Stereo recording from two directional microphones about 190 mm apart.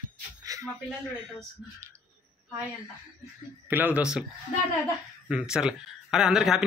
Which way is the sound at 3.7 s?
10° right (ahead or behind).